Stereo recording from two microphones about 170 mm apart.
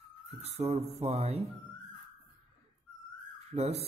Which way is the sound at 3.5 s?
40° right (ahead or behind).